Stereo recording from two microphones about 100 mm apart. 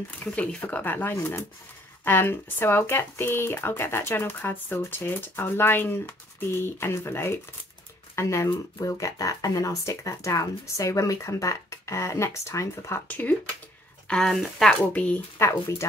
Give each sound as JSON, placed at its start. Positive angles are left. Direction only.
{"t": 0.2, "sound": "speech", "side_deg": 15}
{"t": 14.0, "sound": "speech", "side_deg": 5}
{"t": 14.7, "sound": "speech", "side_deg": 15}
{"t": 15.4, "sound": "speech", "side_deg": 25}